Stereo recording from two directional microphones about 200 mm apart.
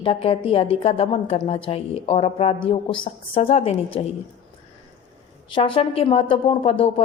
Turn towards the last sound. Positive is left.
turn(degrees=25)  # may be behind; listen again after turning